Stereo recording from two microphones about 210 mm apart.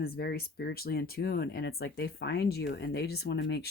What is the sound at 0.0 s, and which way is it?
Speech, 45° left (ahead or behind).